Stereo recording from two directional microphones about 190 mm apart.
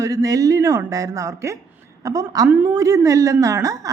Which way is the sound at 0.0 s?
15° right (ahead or behind).